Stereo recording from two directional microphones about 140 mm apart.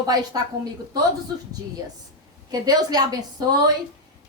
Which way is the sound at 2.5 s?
30° right (ahead or behind).